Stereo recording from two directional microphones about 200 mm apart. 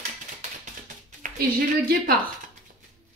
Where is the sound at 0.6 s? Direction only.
35° right (ahead or behind).